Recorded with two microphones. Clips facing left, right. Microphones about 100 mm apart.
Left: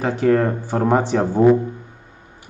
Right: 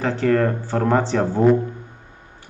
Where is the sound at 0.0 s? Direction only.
10° left (ahead or behind).